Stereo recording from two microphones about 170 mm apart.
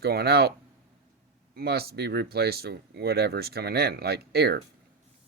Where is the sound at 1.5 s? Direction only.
65° right (ahead or behind).